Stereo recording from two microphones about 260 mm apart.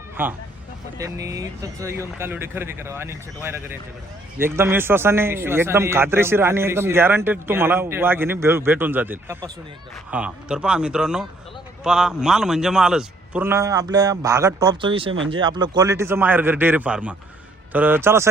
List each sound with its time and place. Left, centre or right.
0.2 s a man's voice: centre